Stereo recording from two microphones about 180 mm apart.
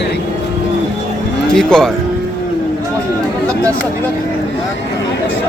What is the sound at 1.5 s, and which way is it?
Speech, 5° left (ahead or behind).